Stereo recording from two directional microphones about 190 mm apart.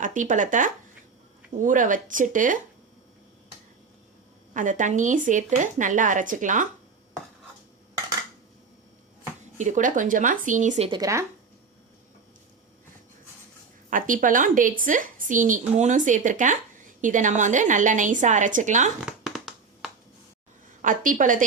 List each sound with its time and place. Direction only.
0.0 s a woman's voice: 45° right (ahead or behind)
4.5 s a woman's voice: 45° right (ahead or behind)
9.6 s a woman's voice: 40° right (ahead or behind)
10.8 s speech: 20° right (ahead or behind)
13.9 s a woman's voice: 45° right (ahead or behind)
18.9 s a sound: 5° right (ahead or behind)
20.8 s a woman's voice: 45° right (ahead or behind)